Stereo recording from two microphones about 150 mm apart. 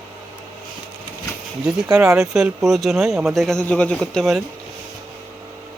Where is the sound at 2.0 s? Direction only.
20° right (ahead or behind).